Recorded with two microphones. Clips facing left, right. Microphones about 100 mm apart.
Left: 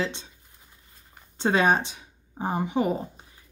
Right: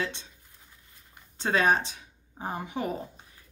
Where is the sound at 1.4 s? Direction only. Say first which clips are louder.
Left 3 dB; 20° left (ahead or behind).